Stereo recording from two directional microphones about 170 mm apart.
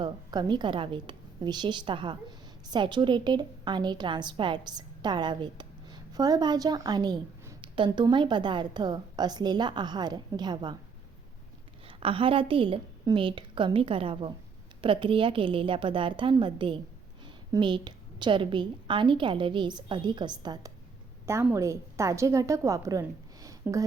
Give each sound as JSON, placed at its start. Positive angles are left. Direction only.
{"t": 0.0, "sound": "a woman's voice", "side_deg": -25}
{"t": 11.9, "sound": "a woman's voice", "side_deg": -30}